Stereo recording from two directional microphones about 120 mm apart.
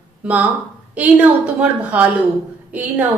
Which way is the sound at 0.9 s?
10° right (ahead or behind).